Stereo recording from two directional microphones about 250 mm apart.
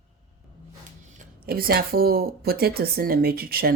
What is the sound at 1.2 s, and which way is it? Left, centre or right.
Speech, right.